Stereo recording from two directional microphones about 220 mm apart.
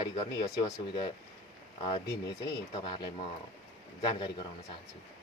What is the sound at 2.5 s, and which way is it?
Speech, 20° left (ahead or behind).